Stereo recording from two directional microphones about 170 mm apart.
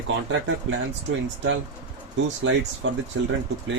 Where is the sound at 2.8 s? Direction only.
90° right.